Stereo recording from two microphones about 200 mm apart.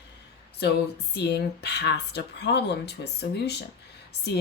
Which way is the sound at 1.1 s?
55° left (ahead or behind).